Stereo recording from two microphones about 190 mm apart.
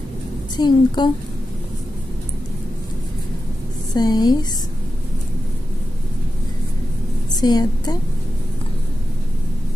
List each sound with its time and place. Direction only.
0.6 s a woman's voice: 25° left (ahead or behind)
3.9 s a woman's voice: 20° left (ahead or behind)
7.3 s a woman's voice: 20° left (ahead or behind)